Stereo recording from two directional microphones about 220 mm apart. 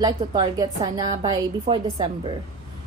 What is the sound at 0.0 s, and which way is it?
A woman's voice, 20° right (ahead or behind).